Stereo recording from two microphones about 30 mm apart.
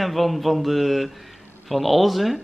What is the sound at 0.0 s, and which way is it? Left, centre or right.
Speech, centre.